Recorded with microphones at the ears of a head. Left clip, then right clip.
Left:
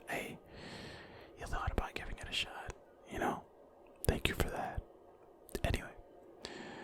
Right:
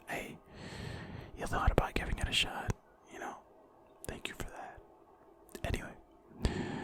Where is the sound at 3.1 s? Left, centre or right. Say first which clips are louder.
Left 7 dB; left.